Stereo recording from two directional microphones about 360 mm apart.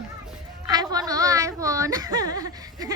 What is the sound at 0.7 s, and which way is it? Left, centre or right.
A woman's voice, centre.